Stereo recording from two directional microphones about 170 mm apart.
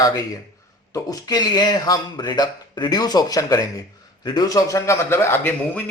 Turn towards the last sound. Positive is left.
turn(degrees=10)  # may be behind; listen again after turning